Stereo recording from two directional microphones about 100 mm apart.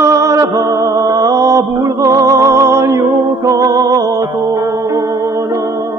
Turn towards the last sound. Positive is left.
turn(degrees=-35)  # may be behind; listen again after turning